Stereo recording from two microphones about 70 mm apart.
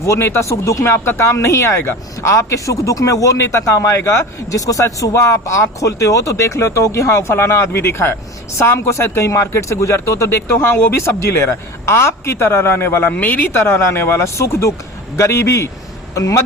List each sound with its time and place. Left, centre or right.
0.0 s a man's voice: left
13.1 s speech: left
13.6 s a man's voice: left